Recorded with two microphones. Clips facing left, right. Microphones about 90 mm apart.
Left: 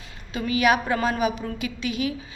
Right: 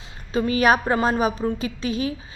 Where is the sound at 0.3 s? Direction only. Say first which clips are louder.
Right 3 dB; 35° right (ahead or behind).